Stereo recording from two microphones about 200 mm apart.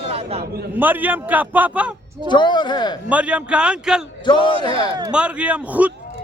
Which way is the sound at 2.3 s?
20° left (ahead or behind).